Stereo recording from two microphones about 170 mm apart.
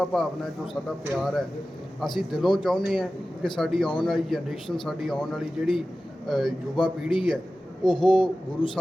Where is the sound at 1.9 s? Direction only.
Centre (ahead or behind).